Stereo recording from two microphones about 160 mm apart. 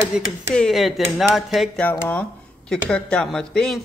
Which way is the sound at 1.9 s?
10° left (ahead or behind).